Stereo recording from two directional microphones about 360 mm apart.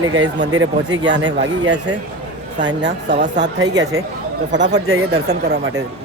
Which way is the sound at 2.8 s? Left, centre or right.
Right.